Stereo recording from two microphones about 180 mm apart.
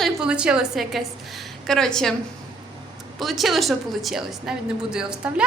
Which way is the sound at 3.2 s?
Centre (ahead or behind).